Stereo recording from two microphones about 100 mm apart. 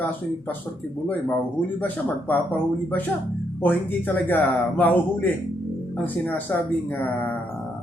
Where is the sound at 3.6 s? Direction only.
20° left (ahead or behind).